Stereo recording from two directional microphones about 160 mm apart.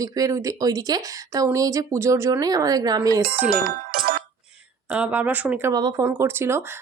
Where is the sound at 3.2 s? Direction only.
70° right (ahead or behind).